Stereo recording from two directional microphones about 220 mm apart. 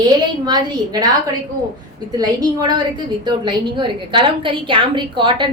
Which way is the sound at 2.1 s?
20° right (ahead or behind).